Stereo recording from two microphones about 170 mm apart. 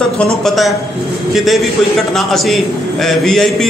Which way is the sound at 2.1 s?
Centre (ahead or behind).